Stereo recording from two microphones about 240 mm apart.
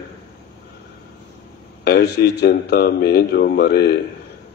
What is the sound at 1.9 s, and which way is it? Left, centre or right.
Speech, left.